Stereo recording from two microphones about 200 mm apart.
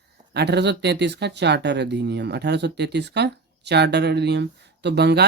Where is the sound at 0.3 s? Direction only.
55° right (ahead or behind).